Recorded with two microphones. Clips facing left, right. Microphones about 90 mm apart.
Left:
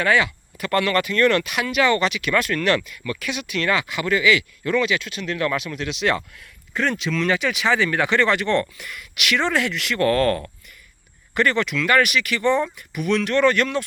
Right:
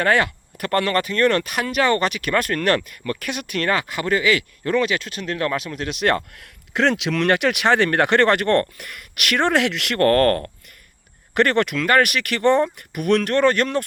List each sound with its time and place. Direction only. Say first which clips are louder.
0.0 s speech: right 1 dB; 50° right (ahead or behind)